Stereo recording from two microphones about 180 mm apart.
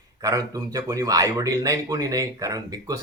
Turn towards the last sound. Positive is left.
turn(degrees=-20)  # may be behind; listen again after turning